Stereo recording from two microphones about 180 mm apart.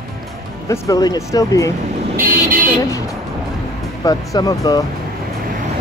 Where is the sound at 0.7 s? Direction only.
20° left (ahead or behind).